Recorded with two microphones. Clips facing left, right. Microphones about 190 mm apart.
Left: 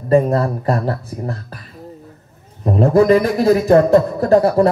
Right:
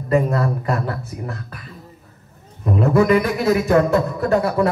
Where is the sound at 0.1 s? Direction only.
35° left (ahead or behind).